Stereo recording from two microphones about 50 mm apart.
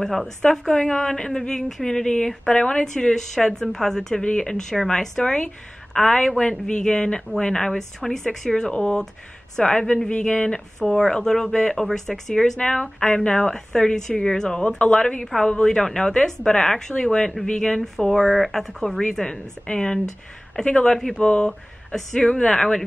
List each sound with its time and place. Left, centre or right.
0.0 s a woman's voice: centre
12.5 s a woman's voice: centre
21.5 s a woman's voice: centre